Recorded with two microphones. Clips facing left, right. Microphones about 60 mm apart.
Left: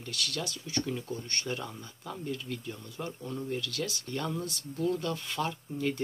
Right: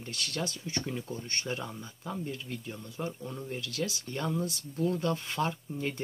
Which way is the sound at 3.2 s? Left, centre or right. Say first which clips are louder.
Left 2 dB; centre.